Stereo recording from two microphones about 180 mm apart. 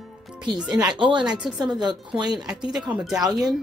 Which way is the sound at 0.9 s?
30° right (ahead or behind).